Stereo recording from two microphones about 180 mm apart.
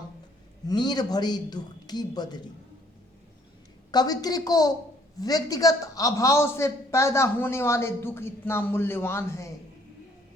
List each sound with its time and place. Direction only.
0.7 s speech: 25° left (ahead or behind)
3.9 s a man's voice: 20° left (ahead or behind)